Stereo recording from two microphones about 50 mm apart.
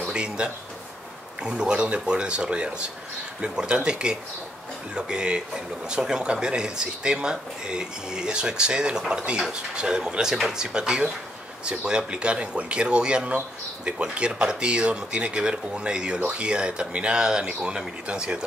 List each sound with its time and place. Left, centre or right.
0.1 s speech: centre